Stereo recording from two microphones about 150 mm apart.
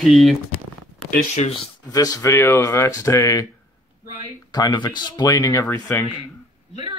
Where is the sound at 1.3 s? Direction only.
45° left (ahead or behind).